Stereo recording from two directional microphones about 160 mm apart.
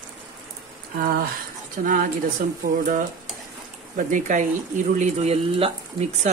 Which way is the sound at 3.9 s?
55° right (ahead or behind).